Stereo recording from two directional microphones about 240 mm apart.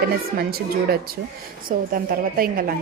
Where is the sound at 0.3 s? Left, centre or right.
Right.